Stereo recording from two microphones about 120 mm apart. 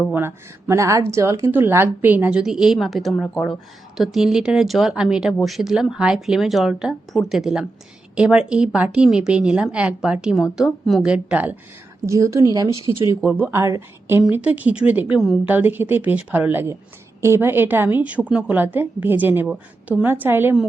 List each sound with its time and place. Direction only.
0.1 s a woman's voice: 20° right (ahead or behind)
12.0 s a woman's voice: 25° right (ahead or behind)